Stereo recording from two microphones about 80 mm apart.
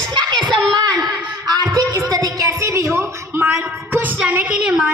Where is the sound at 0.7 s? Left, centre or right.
Right.